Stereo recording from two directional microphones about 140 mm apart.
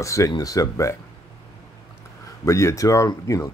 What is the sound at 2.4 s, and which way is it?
Speech, 20° left (ahead or behind).